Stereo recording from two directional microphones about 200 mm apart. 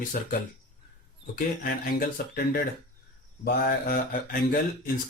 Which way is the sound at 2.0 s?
50° left (ahead or behind).